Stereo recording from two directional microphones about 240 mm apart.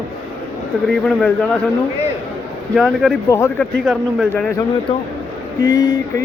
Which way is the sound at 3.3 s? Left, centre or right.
Centre.